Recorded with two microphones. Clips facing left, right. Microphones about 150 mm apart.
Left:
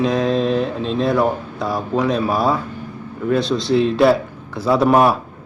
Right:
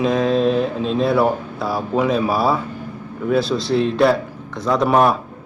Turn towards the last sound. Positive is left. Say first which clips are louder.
# left 2 dB
turn(degrees=5)  # may be behind; listen again after turning